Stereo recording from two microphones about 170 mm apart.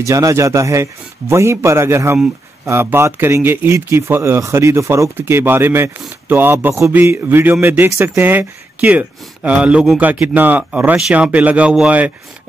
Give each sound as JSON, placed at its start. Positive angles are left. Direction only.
{"t": 0.0, "sound": "speech", "side_deg": -20}